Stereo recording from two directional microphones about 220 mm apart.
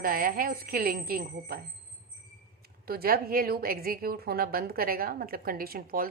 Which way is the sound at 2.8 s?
45° right (ahead or behind).